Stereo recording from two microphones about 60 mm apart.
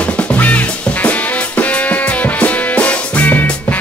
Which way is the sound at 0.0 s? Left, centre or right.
Left.